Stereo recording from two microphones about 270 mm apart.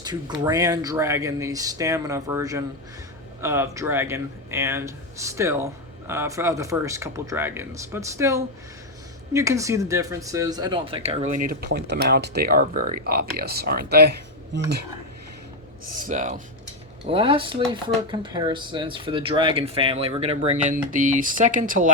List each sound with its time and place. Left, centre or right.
0.0 s speech: centre; by 14.6 s right
16.0 s speech: right